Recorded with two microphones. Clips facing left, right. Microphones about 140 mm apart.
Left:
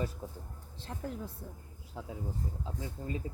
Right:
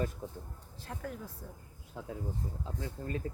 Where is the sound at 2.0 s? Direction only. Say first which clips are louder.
Right 1 dB; 10° left (ahead or behind).